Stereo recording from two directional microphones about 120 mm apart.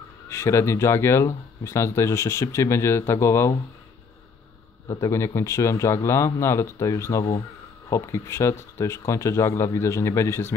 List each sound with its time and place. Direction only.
0.3 s speech: 25° left (ahead or behind)
4.8 s speech: 25° left (ahead or behind)